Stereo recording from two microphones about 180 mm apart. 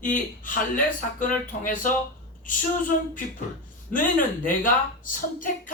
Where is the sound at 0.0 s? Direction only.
45° left (ahead or behind).